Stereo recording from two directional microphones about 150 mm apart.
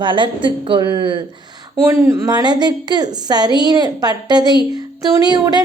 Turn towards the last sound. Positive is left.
turn(degrees=-30)  # may be behind; listen again after turning